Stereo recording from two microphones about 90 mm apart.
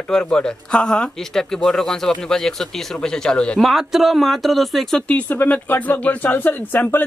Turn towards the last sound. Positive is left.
turn(degrees=20)  # may be behind; listen again after turning